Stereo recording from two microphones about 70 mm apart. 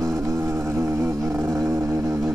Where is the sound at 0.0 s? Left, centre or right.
Right.